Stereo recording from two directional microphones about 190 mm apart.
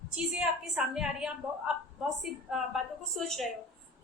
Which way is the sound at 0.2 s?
5° right (ahead or behind).